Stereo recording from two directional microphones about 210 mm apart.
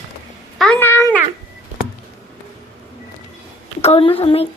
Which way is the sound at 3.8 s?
30° left (ahead or behind).